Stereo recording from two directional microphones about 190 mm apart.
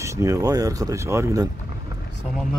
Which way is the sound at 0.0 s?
15° right (ahead or behind).